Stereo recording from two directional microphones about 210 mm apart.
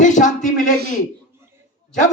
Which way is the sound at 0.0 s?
35° left (ahead or behind).